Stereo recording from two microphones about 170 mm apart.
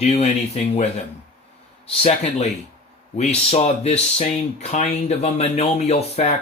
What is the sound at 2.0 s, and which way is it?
Speech, 40° left (ahead or behind).